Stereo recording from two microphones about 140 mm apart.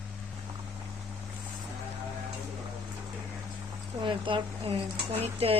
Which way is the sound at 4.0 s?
35° right (ahead or behind).